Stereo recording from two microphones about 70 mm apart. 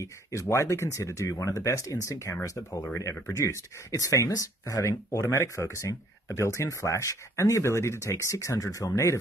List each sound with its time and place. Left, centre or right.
0.0 s speech: left